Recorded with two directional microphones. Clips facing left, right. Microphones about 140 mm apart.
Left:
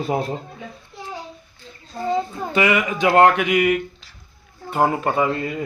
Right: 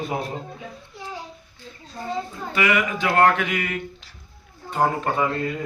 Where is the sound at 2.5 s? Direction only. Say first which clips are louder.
Left 2 dB; 20° left (ahead or behind); by 5.3 s 5° left (ahead or behind).